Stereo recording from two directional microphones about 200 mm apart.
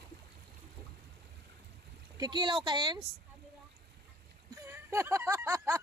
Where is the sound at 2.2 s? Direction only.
20° right (ahead or behind).